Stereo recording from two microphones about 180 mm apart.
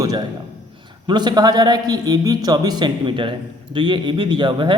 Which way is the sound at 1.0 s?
25° right (ahead or behind).